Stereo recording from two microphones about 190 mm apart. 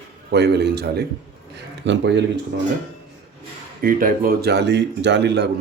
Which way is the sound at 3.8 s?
50° right (ahead or behind).